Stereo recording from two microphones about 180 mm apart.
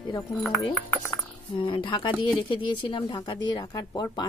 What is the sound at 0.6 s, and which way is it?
A woman's voice, 25° left (ahead or behind).